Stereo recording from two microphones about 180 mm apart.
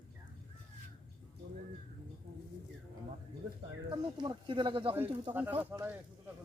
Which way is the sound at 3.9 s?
25° right (ahead or behind).